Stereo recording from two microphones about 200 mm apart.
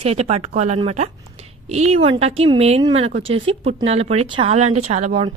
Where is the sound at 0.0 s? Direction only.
30° right (ahead or behind).